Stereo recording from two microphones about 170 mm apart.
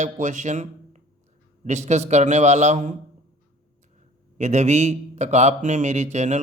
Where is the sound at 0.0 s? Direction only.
45° right (ahead or behind).